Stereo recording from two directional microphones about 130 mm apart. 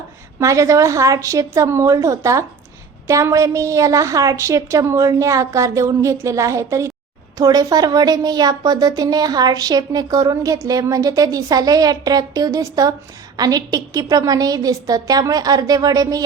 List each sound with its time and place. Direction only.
0.3 s a woman's voice: 25° right (ahead or behind)